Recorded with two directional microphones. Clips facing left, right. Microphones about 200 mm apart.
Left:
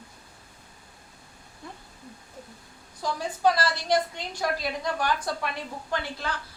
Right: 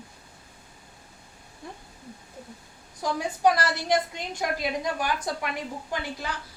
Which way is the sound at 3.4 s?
15° right (ahead or behind).